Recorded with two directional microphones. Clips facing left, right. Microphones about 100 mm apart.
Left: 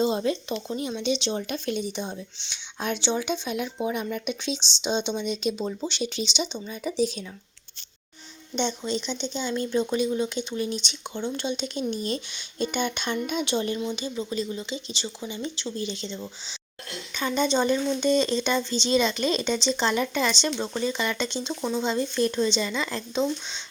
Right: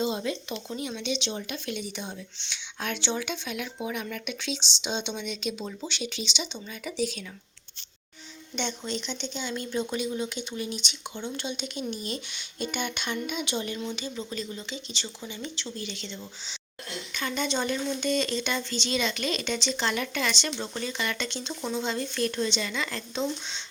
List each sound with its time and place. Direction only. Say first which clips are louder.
0.0 s speech: left 5 dB; 35° left (ahead or behind)
8.8 s speech: left 5 dB; 10° left (ahead or behind)
9.3 s speech: left 5 dB; 20° left (ahead or behind)
13.7 s speech: left 4 dB; 20° left (ahead or behind)